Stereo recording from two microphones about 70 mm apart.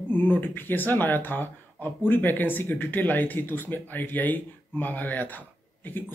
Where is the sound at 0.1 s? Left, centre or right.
Left.